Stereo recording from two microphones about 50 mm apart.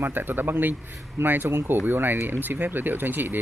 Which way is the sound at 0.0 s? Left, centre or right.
Right.